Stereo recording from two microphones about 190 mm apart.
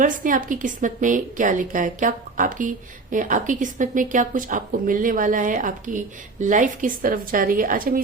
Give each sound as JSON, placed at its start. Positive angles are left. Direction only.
{"t": 0.0, "sound": "a woman's voice", "side_deg": -45}